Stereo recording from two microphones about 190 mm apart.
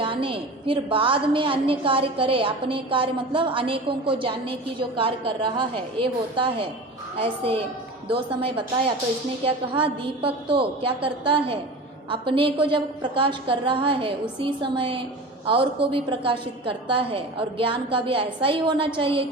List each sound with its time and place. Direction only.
0.0 s a woman's voice: 25° right (ahead or behind)